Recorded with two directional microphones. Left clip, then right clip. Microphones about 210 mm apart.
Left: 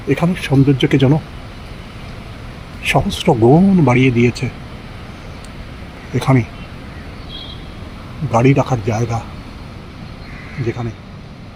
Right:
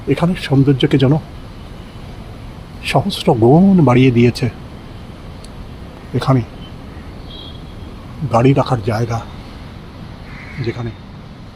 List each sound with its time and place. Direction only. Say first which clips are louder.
0.1 s speech: even; centre (ahead or behind)
2.8 s speech: even; centre (ahead or behind)
6.1 s speech: left 1 dB; centre (ahead or behind)
8.3 s speech: right 1 dB; centre (ahead or behind)